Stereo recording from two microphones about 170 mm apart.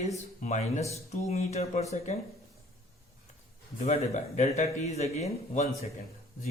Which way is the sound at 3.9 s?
45° left (ahead or behind).